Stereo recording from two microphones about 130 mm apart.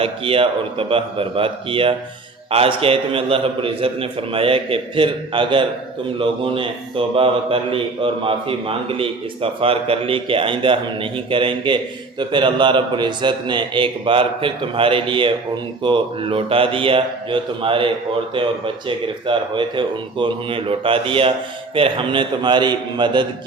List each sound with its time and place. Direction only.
0.0 s a man's voice: 45° right (ahead or behind)